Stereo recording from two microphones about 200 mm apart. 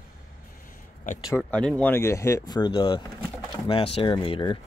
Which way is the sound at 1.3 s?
5° left (ahead or behind).